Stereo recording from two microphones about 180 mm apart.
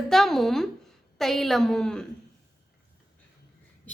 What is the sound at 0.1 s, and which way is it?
A woman's voice, centre (ahead or behind).